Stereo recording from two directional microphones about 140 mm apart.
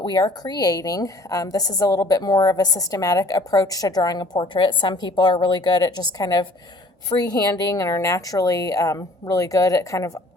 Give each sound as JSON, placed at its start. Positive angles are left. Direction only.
{"t": 0.0, "sound": "a woman's voice", "side_deg": 30}